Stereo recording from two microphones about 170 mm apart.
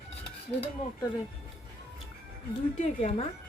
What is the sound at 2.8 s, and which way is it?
Speech, 35° left (ahead or behind).